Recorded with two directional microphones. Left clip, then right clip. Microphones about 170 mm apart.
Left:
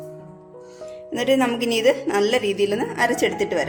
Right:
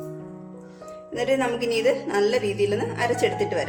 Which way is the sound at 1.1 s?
55° left (ahead or behind).